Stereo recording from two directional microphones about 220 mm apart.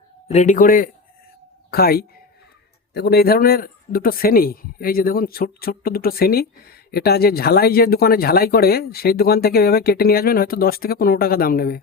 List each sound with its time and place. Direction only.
0.3 s a man's voice: 30° left (ahead or behind)